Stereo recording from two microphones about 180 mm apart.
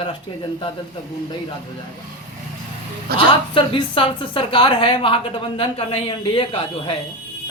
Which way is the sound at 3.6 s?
30° left (ahead or behind).